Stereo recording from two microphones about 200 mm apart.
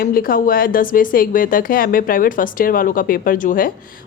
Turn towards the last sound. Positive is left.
turn(degrees=45)  # may be behind; listen again after turning